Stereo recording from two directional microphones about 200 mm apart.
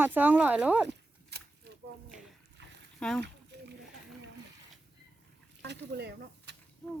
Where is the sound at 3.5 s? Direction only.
60° right (ahead or behind).